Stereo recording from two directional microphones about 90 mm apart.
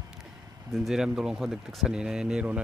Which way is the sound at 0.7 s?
5° right (ahead or behind).